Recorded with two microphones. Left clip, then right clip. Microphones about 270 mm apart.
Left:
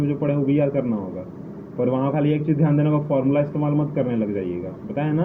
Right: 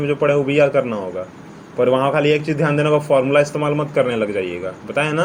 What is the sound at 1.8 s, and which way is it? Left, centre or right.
A man's voice, right.